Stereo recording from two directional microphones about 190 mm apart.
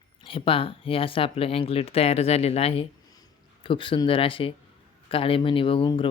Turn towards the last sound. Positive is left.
turn(degrees=25)  # may be behind; listen again after turning